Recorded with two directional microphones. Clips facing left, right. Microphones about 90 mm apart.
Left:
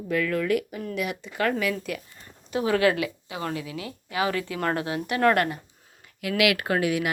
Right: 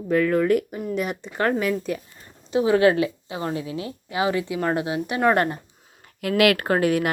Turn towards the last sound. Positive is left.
turn(degrees=-45)  # may be behind; listen again after turning